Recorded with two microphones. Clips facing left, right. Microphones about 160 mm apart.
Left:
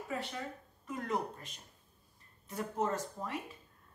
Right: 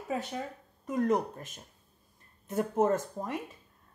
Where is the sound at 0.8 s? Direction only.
45° right (ahead or behind).